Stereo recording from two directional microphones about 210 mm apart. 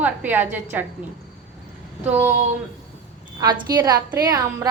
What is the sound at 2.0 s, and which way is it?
Speech, 10° right (ahead or behind).